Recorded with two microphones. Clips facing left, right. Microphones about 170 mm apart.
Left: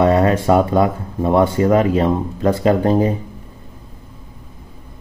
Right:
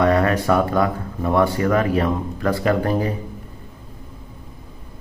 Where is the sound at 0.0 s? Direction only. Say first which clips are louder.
Left 3 dB; 25° left (ahead or behind).